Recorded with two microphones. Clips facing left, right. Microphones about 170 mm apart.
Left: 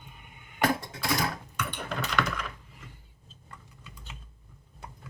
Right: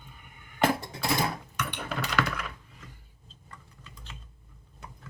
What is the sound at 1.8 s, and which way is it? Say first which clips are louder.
Keys jangling: right 1 dB; 5° right (ahead or behind).